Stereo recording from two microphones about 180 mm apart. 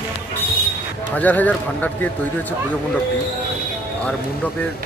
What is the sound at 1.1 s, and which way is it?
Speech, 10° left (ahead or behind).